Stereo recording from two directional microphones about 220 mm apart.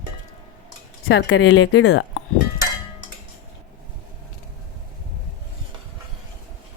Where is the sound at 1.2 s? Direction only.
50° left (ahead or behind).